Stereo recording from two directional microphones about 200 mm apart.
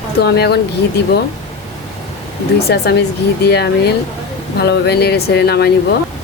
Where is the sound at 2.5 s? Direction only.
55° left (ahead or behind).